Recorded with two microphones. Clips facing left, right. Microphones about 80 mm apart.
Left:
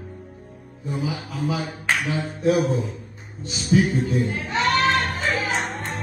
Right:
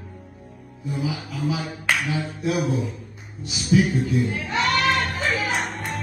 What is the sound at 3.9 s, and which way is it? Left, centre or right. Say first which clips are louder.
Speech: even; left.